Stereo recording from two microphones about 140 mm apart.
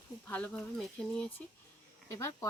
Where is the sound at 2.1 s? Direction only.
20° left (ahead or behind).